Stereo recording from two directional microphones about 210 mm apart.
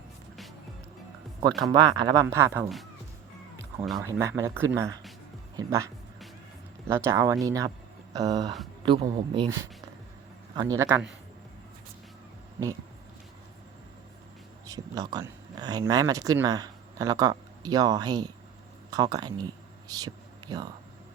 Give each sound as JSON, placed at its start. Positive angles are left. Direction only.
{"t": 1.4, "sound": "speech", "side_deg": -20}
{"t": 4.0, "sound": "speech", "side_deg": -15}
{"t": 14.7, "sound": "speech", "side_deg": -20}